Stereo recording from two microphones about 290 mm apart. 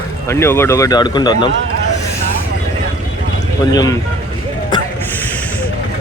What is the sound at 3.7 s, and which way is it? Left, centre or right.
Speech, centre.